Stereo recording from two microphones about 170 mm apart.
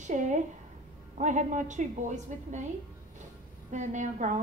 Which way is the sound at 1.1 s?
45° right (ahead or behind).